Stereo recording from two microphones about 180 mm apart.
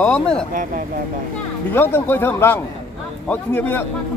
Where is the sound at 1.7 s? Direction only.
10° left (ahead or behind).